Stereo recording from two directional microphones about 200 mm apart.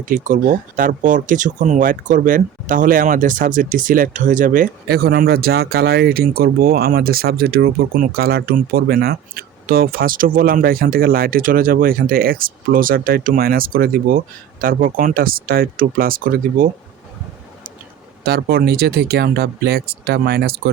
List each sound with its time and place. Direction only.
0.0 s speech: 40° right (ahead or behind)
18.2 s speech: 50° right (ahead or behind)